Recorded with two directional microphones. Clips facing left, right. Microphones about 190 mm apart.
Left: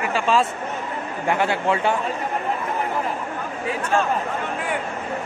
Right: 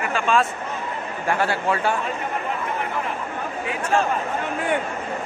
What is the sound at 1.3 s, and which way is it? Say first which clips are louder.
Speech: left 1 dB; 20° left (ahead or behind).